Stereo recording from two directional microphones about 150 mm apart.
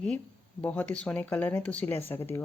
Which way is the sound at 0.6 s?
10° left (ahead or behind).